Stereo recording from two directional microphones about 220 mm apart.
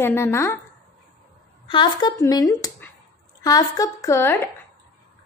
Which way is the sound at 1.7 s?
20° left (ahead or behind).